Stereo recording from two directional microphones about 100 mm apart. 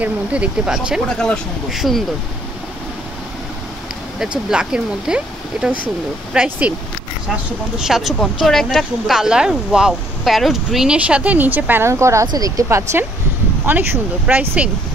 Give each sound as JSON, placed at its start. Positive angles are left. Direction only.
{"t": 0.0, "sound": "speech", "side_deg": -10}
{"t": 1.0, "sound": "speech", "side_deg": 5}
{"t": 4.5, "sound": "speech", "side_deg": -5}
{"t": 7.8, "sound": "speech", "side_deg": -5}
{"t": 13.7, "sound": "speech", "side_deg": -15}